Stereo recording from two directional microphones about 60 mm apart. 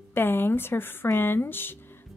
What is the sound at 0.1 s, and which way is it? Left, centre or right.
Speech, left.